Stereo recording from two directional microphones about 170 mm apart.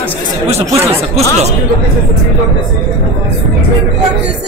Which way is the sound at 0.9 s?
35° right (ahead or behind).